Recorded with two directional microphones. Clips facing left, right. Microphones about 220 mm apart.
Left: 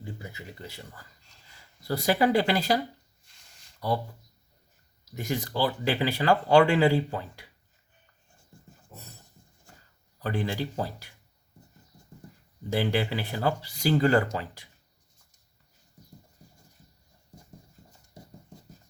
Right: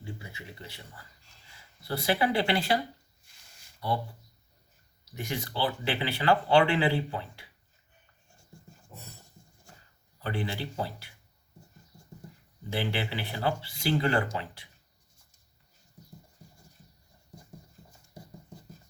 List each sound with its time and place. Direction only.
0.2 s speech: 45° left (ahead or behind)
1.9 s speech: 40° left (ahead or behind)
5.1 s speech: 45° left (ahead or behind)
10.2 s speech: 45° left (ahead or behind)
12.7 s speech: 45° left (ahead or behind)